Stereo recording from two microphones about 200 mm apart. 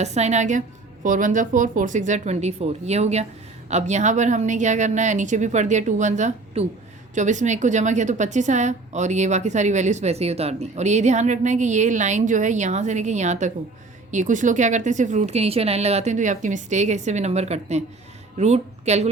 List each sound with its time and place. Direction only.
0.0 s a woman's voice: 35° right (ahead or behind)